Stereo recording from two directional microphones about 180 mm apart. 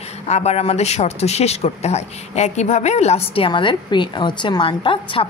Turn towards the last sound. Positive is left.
turn(degrees=30)  # may be behind; listen again after turning